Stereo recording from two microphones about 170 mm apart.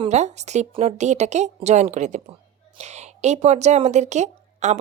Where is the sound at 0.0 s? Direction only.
40° right (ahead or behind).